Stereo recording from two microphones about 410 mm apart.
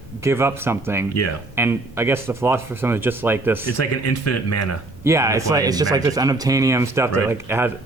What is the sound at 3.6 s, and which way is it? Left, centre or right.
Speech, left.